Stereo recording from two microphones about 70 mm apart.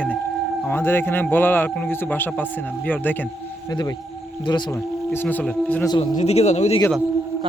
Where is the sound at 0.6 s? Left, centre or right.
Left.